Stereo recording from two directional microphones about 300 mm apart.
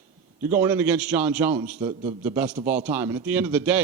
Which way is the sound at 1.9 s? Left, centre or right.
Right.